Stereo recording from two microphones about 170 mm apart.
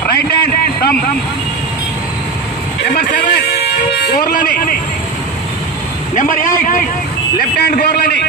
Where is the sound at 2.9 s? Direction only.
60° left (ahead or behind).